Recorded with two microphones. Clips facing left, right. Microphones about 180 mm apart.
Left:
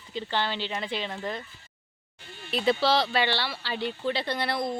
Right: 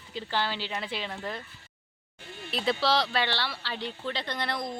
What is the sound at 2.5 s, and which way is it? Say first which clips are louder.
Speech: left 3 dB; centre (ahead or behind).